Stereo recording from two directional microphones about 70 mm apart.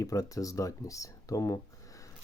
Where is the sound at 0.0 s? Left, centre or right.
Left.